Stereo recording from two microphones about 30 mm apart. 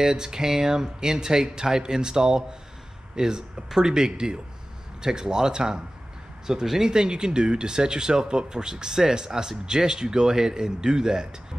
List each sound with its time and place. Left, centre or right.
0.1 s speech: right